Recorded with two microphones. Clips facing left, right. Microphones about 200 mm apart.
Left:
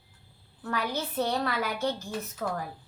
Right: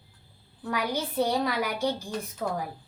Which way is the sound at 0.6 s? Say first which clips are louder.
Right 2 dB; 15° right (ahead or behind).